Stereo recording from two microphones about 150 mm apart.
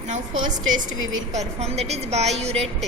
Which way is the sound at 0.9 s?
50° right (ahead or behind).